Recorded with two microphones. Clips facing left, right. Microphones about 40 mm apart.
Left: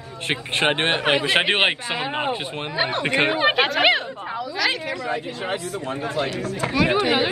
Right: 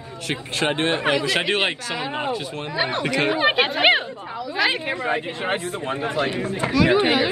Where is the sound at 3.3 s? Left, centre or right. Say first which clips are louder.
Even; centre.